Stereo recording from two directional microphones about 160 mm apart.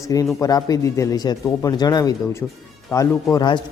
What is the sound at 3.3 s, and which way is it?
Speech, 25° left (ahead or behind).